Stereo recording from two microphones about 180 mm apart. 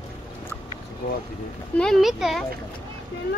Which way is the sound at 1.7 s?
5° left (ahead or behind).